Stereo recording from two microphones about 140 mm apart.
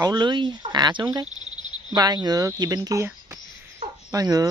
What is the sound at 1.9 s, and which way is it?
Speech, 30° right (ahead or behind).